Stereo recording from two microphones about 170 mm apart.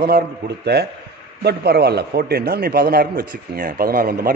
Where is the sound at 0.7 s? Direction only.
70° right (ahead or behind).